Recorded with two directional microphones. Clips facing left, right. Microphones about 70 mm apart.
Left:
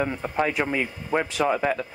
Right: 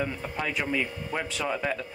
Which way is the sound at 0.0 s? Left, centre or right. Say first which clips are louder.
Left 6 dB; left.